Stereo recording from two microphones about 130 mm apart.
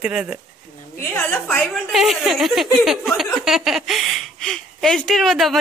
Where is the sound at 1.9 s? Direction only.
Centre (ahead or behind).